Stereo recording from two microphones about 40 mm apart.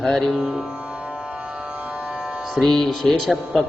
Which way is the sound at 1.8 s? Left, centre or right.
Right.